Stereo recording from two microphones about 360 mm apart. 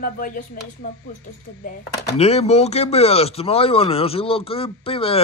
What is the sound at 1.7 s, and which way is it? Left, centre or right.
Speech, centre.